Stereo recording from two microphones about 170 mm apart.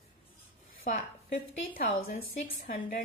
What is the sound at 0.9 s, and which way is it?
A woman's voice, 60° left (ahead or behind).